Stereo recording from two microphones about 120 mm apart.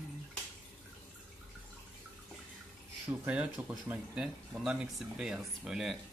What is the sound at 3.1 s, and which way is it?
Speech, 10° right (ahead or behind).